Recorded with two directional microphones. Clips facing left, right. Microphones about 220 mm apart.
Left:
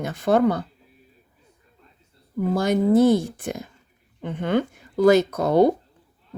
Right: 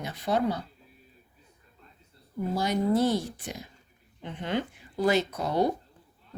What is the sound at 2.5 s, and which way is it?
A woman's voice, 50° left (ahead or behind).